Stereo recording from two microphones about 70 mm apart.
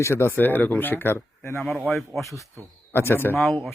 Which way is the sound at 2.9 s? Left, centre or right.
Left.